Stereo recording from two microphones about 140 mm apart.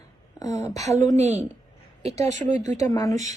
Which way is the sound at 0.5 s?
25° left (ahead or behind).